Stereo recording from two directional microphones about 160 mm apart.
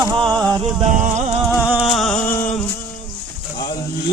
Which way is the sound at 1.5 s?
5° right (ahead or behind).